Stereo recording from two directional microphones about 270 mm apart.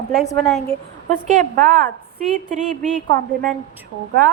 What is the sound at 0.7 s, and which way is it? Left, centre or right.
Speech, centre.